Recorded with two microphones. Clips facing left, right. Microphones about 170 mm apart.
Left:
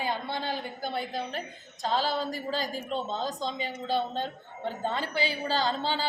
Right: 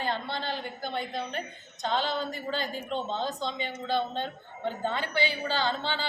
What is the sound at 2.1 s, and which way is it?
A woman's voice, 35° left (ahead or behind).